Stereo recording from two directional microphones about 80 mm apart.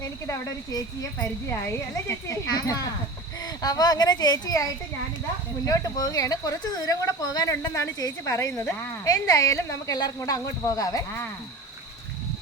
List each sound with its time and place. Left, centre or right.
0.0 s a woman's voice: left
2.5 s a woman's voice: left